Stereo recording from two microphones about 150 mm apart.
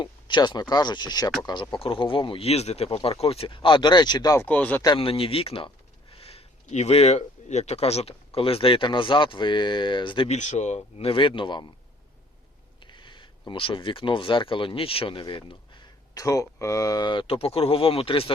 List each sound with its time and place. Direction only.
0.0 s a sound: 30° left (ahead or behind)
0.7 s speech: 30° left (ahead or behind)
4.4 s speech: 10° left (ahead or behind)
4.9 s speech: 40° left (ahead or behind)
10.2 s speech: 50° left (ahead or behind); by 11.6 s 35° left (ahead or behind)
12.8 s a sound: 30° left (ahead or behind)
13.5 s speech: 35° left (ahead or behind)